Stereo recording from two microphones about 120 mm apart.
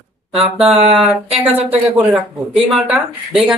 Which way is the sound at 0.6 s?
55° right (ahead or behind).